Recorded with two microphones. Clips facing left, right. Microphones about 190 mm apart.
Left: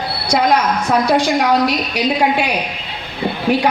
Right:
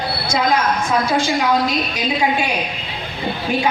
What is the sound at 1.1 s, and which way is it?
Speech, 65° left (ahead or behind).